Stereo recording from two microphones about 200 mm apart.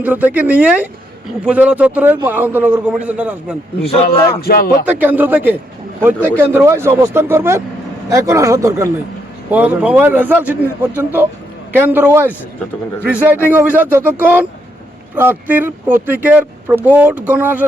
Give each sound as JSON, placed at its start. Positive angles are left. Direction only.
{"t": 0.0, "sound": "speech", "side_deg": -10}
{"t": 4.4, "sound": "speech", "side_deg": 50}
{"t": 4.9, "sound": "speech", "side_deg": -10}